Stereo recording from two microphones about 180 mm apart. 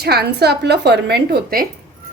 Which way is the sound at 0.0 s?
60° right (ahead or behind).